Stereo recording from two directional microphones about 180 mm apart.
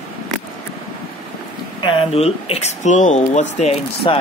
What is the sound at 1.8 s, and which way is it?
Speech, 30° left (ahead or behind).